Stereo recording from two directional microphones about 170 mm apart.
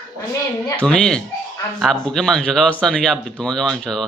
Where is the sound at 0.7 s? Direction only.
5° left (ahead or behind).